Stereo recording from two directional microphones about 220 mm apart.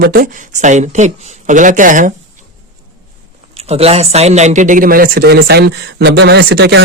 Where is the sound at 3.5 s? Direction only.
30° right (ahead or behind).